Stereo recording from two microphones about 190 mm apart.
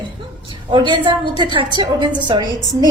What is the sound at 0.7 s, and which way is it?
A woman's voice, 25° right (ahead or behind).